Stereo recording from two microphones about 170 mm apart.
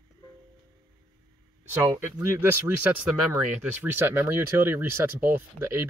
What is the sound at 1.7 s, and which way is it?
Speech, 15° right (ahead or behind).